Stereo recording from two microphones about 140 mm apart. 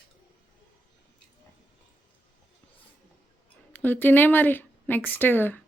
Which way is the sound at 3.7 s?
15° left (ahead or behind).